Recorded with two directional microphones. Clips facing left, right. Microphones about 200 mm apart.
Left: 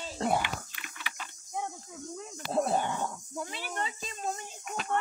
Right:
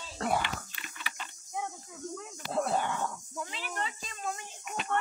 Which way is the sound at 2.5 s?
20° left (ahead or behind).